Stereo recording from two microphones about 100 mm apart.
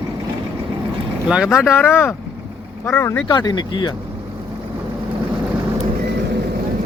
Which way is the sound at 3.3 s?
45° left (ahead or behind).